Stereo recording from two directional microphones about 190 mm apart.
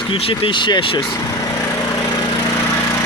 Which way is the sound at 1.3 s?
15° left (ahead or behind).